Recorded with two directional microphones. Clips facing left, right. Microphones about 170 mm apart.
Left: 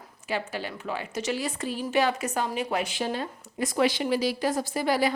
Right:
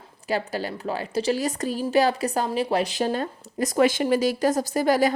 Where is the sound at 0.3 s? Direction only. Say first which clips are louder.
Right 5 dB; 40° right (ahead or behind).